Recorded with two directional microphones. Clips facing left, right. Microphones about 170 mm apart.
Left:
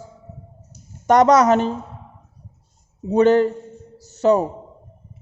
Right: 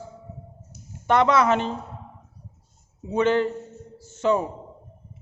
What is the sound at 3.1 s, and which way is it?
A man's voice, 40° left (ahead or behind).